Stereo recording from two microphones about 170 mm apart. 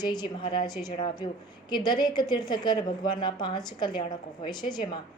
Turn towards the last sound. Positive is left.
turn(degrees=25)  # may be behind; listen again after turning